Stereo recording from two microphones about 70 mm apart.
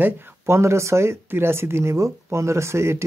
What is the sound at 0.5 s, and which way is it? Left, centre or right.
Speech, right.